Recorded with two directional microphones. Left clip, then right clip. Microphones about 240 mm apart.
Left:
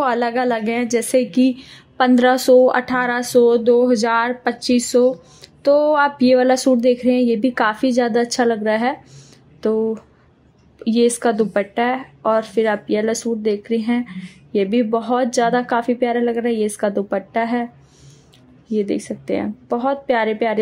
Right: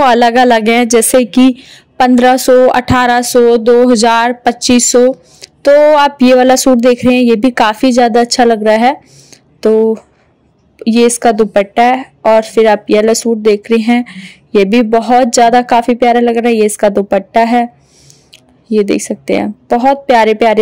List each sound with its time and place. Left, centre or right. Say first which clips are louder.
0.0 s speech: right 11 dB; right
18.7 s speech: right 10 dB; right